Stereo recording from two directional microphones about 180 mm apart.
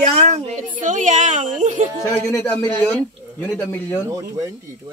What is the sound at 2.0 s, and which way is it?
Speech, 10° left (ahead or behind).